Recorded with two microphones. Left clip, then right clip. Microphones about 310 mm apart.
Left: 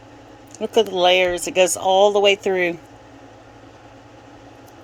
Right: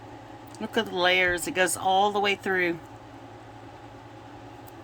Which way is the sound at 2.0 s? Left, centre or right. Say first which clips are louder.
Left 12 dB; right.